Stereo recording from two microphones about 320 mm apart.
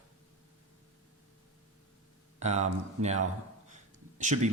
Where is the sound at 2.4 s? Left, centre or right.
Right.